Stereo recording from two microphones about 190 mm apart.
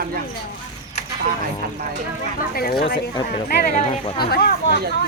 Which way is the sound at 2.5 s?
55° left (ahead or behind).